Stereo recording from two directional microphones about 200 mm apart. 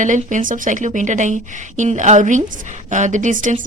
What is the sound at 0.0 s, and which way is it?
A woman's voice, 40° right (ahead or behind).